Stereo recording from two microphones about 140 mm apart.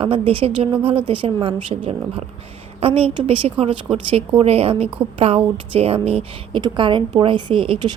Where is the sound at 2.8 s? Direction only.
45° right (ahead or behind).